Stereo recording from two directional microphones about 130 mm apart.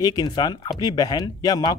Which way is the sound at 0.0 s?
30° left (ahead or behind).